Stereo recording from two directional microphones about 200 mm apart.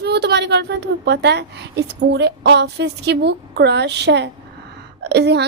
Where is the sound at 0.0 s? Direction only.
55° right (ahead or behind).